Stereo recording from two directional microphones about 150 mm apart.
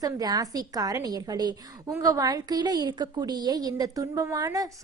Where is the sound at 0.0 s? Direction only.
25° right (ahead or behind).